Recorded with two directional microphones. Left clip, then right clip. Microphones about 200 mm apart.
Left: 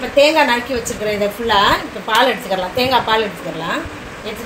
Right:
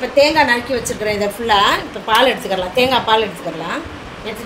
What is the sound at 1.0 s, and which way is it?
A woman's voice, 50° right (ahead or behind).